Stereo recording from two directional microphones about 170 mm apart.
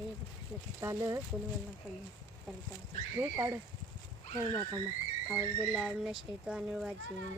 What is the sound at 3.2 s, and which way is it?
Speech, 15° right (ahead or behind).